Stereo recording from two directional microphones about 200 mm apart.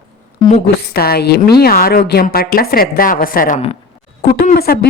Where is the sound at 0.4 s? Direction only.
45° left (ahead or behind).